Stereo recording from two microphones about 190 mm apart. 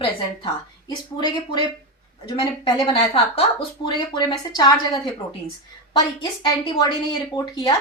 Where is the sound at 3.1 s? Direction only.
30° left (ahead or behind).